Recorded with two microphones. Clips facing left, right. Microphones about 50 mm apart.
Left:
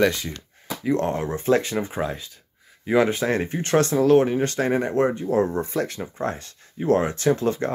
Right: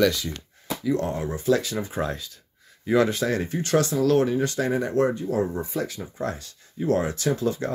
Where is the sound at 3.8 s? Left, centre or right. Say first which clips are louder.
Left 3 dB; left.